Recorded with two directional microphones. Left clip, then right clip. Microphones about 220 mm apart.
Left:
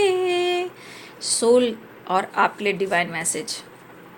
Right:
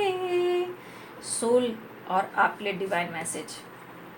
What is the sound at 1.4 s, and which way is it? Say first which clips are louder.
A woman's voice: left 6 dB; 55° left (ahead or behind).